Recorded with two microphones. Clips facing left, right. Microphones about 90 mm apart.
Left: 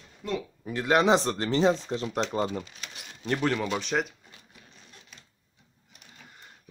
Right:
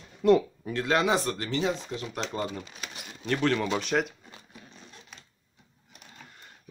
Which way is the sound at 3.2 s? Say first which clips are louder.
Right 1 dB; 15° left (ahead or behind).